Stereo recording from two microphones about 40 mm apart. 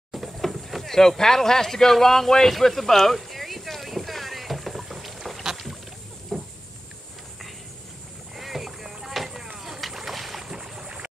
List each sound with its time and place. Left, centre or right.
0.1 s speech: centre
3.2 s boat: centre
6.3 s vehicle: centre
8.4 s boat: centre
10.5 s boat: centre